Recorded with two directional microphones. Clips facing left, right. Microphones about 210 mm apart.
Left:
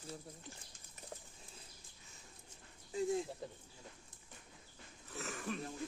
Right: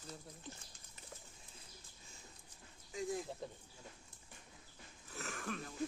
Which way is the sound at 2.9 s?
25° left (ahead or behind).